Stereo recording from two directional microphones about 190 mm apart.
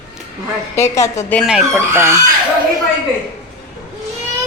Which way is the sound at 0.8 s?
15° left (ahead or behind).